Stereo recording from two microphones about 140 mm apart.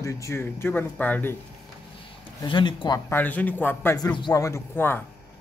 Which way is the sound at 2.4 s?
35° left (ahead or behind).